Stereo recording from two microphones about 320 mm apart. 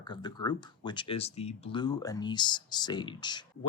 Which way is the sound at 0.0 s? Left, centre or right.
Centre.